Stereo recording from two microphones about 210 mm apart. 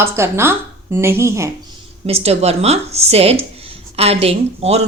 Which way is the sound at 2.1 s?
30° right (ahead or behind).